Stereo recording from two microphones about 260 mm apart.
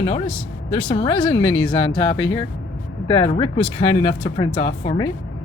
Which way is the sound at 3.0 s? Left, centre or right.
Left.